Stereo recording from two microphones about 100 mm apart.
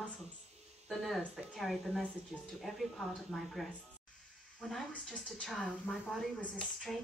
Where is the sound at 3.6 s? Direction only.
Centre (ahead or behind).